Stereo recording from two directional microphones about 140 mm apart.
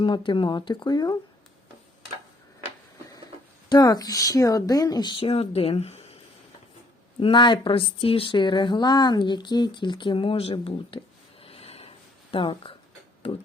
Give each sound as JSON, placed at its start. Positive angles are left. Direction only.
{"t": 0.0, "sound": "speech", "side_deg": 35}
{"t": 3.7, "sound": "speech", "side_deg": 30}
{"t": 7.2, "sound": "speech", "side_deg": 35}
{"t": 11.4, "sound": "a sound", "side_deg": 45}
{"t": 12.3, "sound": "speech", "side_deg": 40}